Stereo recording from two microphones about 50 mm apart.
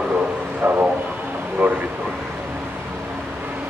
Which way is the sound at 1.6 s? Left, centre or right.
Right.